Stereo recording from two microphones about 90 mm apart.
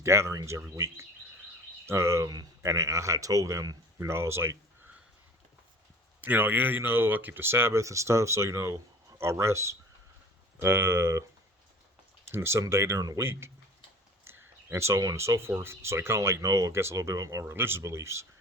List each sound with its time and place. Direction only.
0.0 s speech: 30° right (ahead or behind)
4.1 s speech: 30° right (ahead or behind)
6.2 s speech: 20° right (ahead or behind)
12.3 s speech: 30° right (ahead or behind)